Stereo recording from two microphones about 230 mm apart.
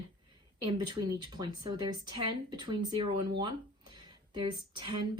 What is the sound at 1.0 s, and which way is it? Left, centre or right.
A woman's voice, centre.